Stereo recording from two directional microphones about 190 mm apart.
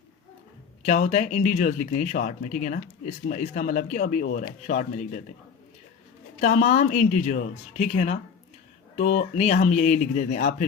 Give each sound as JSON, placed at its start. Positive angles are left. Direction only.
{"t": 0.9, "sound": "speech", "side_deg": 40}
{"t": 6.4, "sound": "speech", "side_deg": 40}